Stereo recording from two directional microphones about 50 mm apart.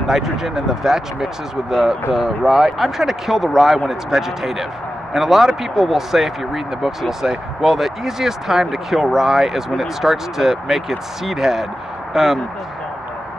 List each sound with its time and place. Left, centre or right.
0.0 s speech: centre